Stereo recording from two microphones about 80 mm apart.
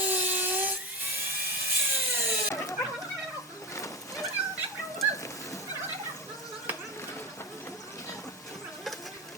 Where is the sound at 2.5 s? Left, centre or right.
Left.